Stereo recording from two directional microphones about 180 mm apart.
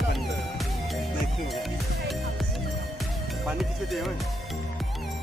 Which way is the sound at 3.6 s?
Centre (ahead or behind).